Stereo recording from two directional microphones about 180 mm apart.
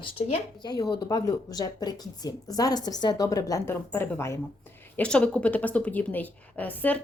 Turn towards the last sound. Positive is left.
turn(degrees=10)  # may be behind; listen again after turning